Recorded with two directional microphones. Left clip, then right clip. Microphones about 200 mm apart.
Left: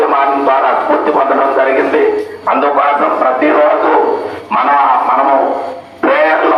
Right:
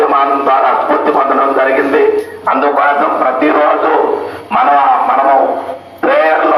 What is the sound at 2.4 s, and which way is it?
Bow-wow, 20° right (ahead or behind).